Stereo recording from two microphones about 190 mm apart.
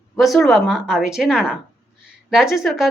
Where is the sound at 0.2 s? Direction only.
Centre (ahead or behind).